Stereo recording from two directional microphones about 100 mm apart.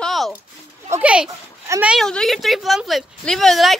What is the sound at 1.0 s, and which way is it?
Speech, 10° right (ahead or behind).